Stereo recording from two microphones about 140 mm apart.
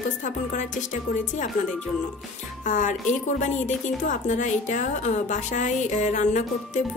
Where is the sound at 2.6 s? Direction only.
65° left (ahead or behind).